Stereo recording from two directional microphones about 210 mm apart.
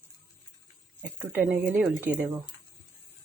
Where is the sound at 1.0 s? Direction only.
10° right (ahead or behind).